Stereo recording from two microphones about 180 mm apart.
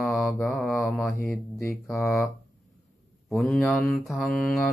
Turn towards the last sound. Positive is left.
turn(degrees=0)  # may be behind; listen again after turning